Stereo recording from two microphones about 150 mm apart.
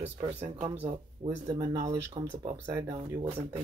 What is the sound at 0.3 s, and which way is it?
Speech, 45° right (ahead or behind).